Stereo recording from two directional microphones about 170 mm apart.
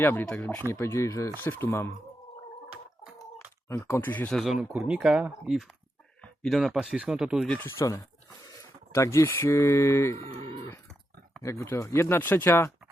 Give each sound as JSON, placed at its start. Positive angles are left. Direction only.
{"t": 0.0, "sound": "speech", "side_deg": 10}
{"t": 3.7, "sound": "speech", "side_deg": 15}
{"t": 7.5, "sound": "speech", "side_deg": 15}
{"t": 10.3, "sound": "speech", "side_deg": -35}
{"t": 11.4, "sound": "speech", "side_deg": 15}